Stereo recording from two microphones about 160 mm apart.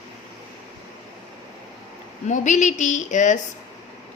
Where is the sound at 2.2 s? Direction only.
50° left (ahead or behind).